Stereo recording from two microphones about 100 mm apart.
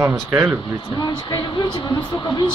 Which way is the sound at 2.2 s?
50° left (ahead or behind).